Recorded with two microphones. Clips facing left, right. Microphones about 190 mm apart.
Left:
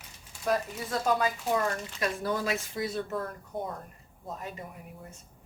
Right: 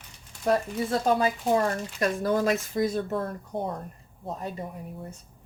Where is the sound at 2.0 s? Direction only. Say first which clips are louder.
Right 6 dB; 45° right (ahead or behind).